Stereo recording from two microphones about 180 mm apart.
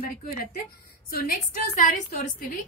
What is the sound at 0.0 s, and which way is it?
A woman's voice, 55° left (ahead or behind).